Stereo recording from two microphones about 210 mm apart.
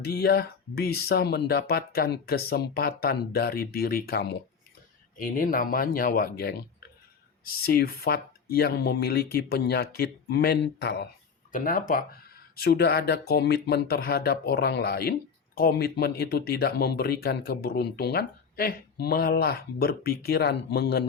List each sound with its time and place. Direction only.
0.0 s speech: 50° left (ahead or behind)
11.5 s speech: 40° left (ahead or behind)